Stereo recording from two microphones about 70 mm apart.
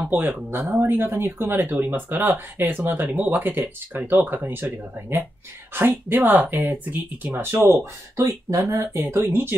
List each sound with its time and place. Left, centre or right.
0.1 s speech: right
7.6 s speech: right